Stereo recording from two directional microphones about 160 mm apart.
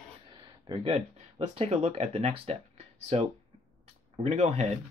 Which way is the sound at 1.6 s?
40° right (ahead or behind).